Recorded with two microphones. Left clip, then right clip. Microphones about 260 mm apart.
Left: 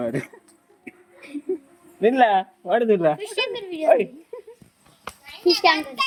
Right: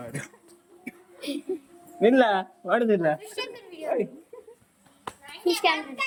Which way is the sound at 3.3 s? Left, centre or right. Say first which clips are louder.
Left 10 dB; left.